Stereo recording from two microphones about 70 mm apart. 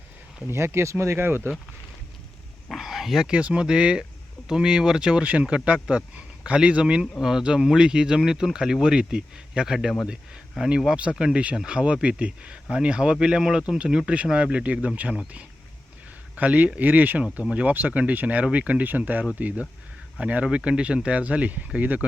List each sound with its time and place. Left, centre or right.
0.5 s speech: right
2.7 s a sound: centre
3.3 s speech: centre
16.3 s speech: centre